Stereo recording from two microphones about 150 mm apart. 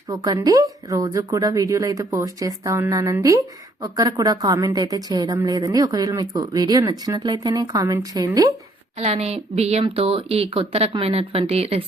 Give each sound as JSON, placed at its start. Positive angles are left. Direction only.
{"t": 0.1, "sound": "speech", "side_deg": -25}
{"t": 9.0, "sound": "a woman's voice", "side_deg": -45}